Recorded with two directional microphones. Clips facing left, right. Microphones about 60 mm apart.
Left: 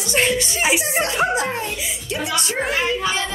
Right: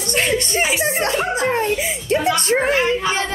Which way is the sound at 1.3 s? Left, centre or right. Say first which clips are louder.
Right 5 dB; right.